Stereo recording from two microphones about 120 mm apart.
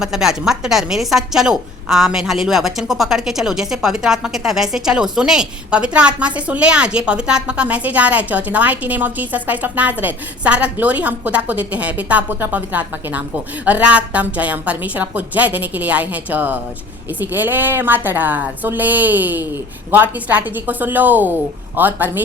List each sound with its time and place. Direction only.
0.0 s a woman's voice: 5° right (ahead or behind)